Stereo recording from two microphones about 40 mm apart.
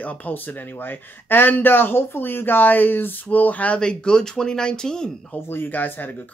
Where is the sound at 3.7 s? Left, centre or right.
Centre.